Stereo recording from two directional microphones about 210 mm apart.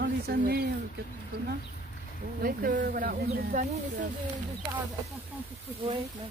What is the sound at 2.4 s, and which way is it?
Speech, 40° right (ahead or behind).